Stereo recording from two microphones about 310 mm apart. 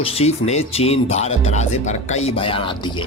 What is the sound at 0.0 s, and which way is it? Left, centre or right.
Speech, centre.